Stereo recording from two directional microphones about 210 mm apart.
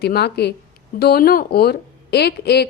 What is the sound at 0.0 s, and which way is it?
A woman's voice, 50° left (ahead or behind).